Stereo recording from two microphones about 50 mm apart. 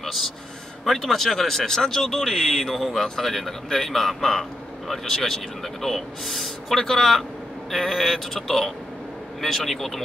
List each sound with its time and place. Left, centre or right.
0.0 s a man's voice: centre